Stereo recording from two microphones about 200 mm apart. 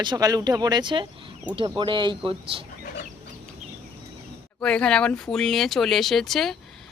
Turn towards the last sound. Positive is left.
turn(degrees=0)  # may be behind; listen again after turning